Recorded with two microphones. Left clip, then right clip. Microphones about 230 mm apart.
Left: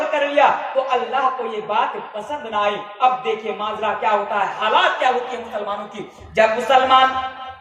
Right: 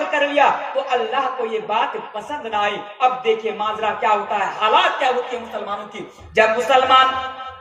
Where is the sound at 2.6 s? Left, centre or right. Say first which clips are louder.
Left 1 dB; right.